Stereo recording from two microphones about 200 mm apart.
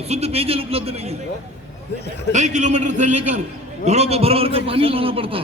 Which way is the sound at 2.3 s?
35° right (ahead or behind).